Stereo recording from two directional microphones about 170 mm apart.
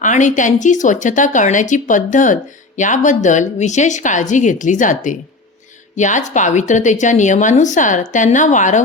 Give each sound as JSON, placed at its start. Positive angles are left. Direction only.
{"t": 0.0, "sound": "speech", "side_deg": 45}